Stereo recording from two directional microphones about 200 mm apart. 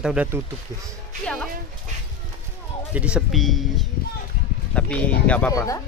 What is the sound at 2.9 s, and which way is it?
Speech, 5° right (ahead or behind).